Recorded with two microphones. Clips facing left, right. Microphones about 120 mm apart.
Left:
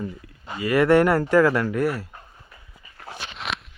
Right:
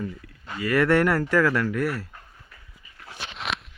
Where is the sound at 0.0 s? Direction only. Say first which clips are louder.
Left 1 dB; 20° left (ahead or behind).